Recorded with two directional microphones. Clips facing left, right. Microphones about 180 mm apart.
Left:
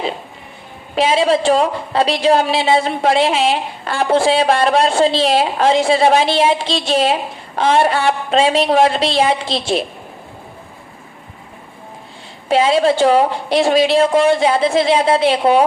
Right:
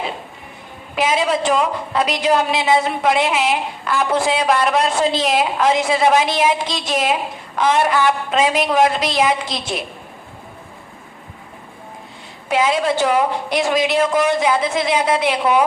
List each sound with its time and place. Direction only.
0.9 s a woman's voice: 30° left (ahead or behind)
12.5 s a woman's voice: 30° left (ahead or behind)